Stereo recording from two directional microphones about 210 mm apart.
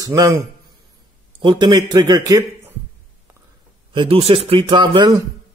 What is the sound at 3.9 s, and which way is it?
Speech, 25° right (ahead or behind).